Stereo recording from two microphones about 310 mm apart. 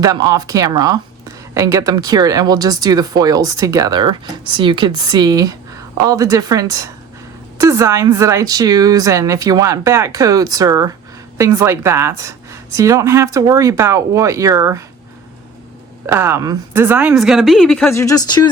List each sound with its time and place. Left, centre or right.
0.0 s speech: centre
16.0 s speech: centre
18.0 s speech: centre